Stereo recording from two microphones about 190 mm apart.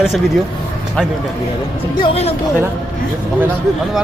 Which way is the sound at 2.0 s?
30° left (ahead or behind).